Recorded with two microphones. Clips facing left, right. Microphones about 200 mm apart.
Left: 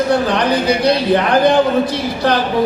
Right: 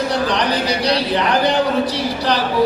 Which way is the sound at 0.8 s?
50° left (ahead or behind).